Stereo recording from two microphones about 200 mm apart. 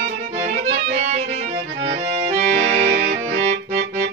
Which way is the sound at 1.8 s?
55° right (ahead or behind).